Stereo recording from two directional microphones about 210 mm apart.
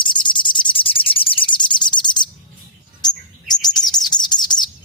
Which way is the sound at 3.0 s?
20° left (ahead or behind).